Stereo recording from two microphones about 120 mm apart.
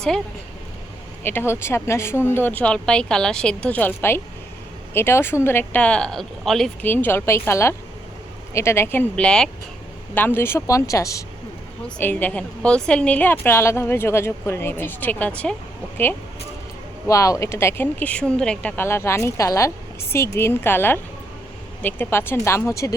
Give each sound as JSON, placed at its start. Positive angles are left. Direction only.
{"t": 1.2, "sound": "a woman's voice", "side_deg": 20}
{"t": 6.8, "sound": "a woman's voice", "side_deg": 15}
{"t": 10.2, "sound": "speech", "side_deg": 15}
{"t": 11.9, "sound": "a woman's voice", "side_deg": 15}
{"t": 17.1, "sound": "a woman's voice", "side_deg": 25}
{"t": 18.8, "sound": "a woman's voice", "side_deg": 20}